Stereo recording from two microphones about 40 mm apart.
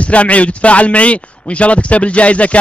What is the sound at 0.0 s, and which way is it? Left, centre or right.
A man's voice, left.